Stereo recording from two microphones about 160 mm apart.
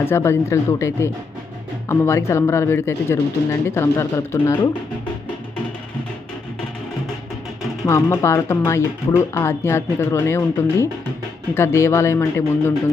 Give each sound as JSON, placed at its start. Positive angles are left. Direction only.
{"t": 0.0, "sound": "speech", "side_deg": 15}
{"t": 7.9, "sound": "speech", "side_deg": 15}